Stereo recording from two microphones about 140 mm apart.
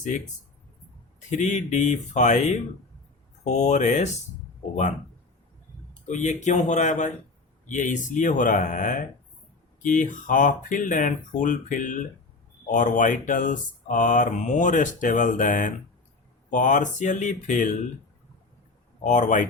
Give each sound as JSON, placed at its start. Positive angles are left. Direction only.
{"t": 0.1, "sound": "speech", "side_deg": 60}
{"t": 1.3, "sound": "speech", "side_deg": 60}
{"t": 6.1, "sound": "speech", "side_deg": 60}
{"t": 19.0, "sound": "speech", "side_deg": 60}